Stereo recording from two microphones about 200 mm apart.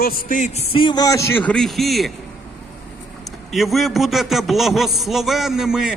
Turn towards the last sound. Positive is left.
turn(degrees=-5)  # may be behind; listen again after turning